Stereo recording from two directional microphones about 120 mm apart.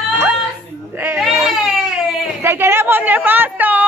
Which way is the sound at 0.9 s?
20° right (ahead or behind).